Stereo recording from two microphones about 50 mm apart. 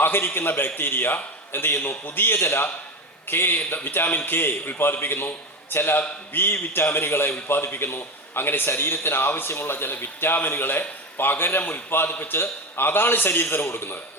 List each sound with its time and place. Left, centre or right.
0.0 s a man's voice: left